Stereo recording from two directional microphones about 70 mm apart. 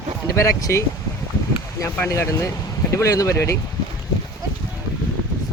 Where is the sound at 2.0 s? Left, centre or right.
Left.